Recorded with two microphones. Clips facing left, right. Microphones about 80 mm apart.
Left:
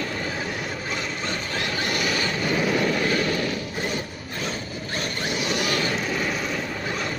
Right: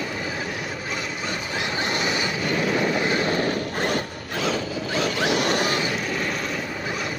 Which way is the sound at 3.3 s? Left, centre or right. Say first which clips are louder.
Right 3 dB; right.